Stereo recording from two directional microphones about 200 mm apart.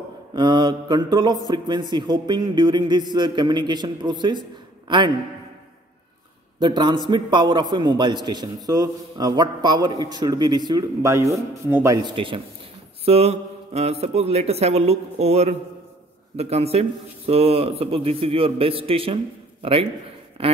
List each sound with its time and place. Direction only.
0.3 s a man's voice: 20° right (ahead or behind)
6.6 s a man's voice: 20° right (ahead or behind)